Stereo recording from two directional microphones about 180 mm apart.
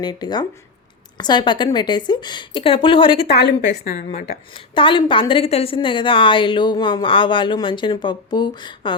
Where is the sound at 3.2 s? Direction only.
65° left (ahead or behind).